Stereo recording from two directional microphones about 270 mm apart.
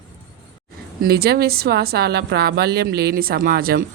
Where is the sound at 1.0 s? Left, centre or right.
Right.